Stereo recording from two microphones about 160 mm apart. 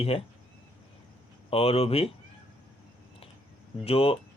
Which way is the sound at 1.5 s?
40° left (ahead or behind).